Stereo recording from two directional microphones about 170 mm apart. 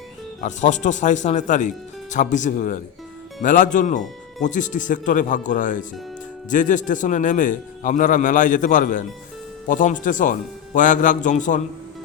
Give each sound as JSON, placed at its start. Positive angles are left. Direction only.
{"t": 0.4, "sound": "a man's voice", "side_deg": 45}